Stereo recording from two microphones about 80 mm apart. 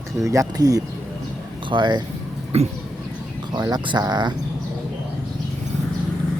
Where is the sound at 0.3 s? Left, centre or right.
Right.